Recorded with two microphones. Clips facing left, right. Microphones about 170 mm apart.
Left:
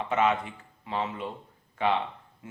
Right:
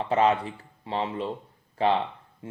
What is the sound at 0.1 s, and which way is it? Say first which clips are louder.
Speech: right 3 dB; 35° right (ahead or behind).